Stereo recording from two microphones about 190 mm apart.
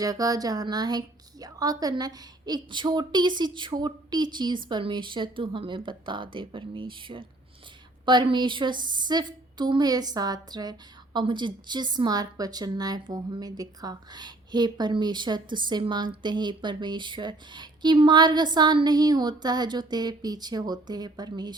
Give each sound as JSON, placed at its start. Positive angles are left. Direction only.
{"t": 0.0, "sound": "a woman's voice", "side_deg": -20}